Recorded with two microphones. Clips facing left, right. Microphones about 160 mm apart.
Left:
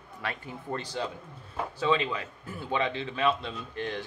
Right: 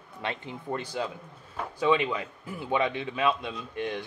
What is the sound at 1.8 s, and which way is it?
A man's voice, 15° right (ahead or behind).